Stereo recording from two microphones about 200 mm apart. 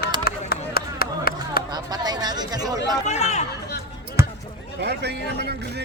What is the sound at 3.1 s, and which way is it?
Chatter, 35° left (ahead or behind).